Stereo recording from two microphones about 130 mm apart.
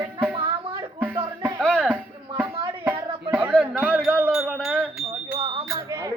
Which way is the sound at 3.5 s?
Centre (ahead or behind).